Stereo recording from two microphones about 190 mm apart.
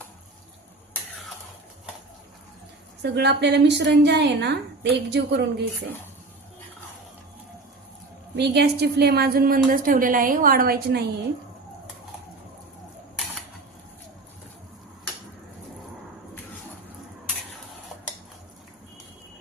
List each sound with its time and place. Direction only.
3.0 s a woman's voice: 60° right (ahead or behind)
8.4 s a woman's voice: 60° right (ahead or behind)